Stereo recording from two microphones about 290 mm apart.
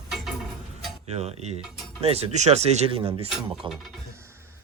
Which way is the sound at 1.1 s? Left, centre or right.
Right.